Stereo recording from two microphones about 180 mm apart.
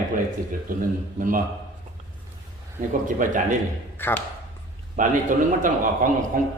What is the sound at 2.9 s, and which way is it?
Speech, 45° right (ahead or behind).